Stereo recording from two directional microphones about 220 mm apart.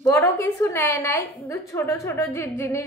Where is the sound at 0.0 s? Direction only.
10° left (ahead or behind).